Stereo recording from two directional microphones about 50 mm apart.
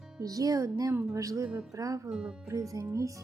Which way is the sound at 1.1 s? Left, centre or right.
Right.